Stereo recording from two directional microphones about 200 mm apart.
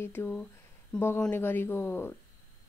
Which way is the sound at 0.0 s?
10° left (ahead or behind).